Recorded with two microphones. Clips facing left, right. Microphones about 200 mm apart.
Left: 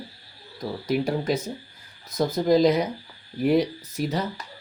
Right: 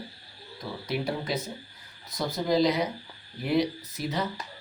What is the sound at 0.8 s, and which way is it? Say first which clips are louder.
Speech: left 6 dB; 45° left (ahead or behind).